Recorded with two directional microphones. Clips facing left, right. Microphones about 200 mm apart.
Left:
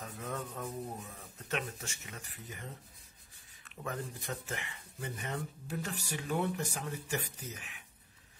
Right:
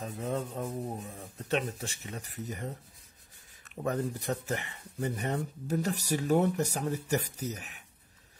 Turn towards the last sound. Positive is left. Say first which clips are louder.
# right 9 dB
turn(degrees=-40)  # may be behind; listen again after turning